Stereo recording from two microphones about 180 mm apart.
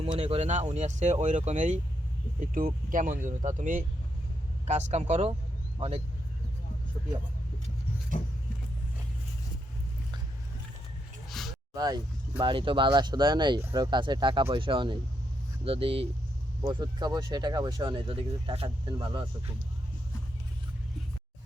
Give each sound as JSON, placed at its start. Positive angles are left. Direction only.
{"t": 0.0, "sound": "speech", "side_deg": -30}
{"t": 11.3, "sound": "a sound", "side_deg": 0}
{"t": 11.7, "sound": "speech", "side_deg": -20}